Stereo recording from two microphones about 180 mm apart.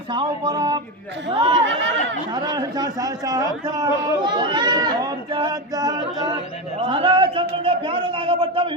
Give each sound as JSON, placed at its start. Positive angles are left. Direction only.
{"t": 0.1, "sound": "a man's voice", "side_deg": -25}
{"t": 1.6, "sound": "chatter", "side_deg": -90}
{"t": 2.3, "sound": "a man's voice", "side_deg": -20}